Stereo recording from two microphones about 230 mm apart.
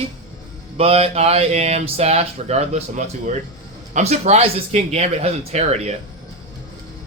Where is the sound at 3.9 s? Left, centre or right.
Right.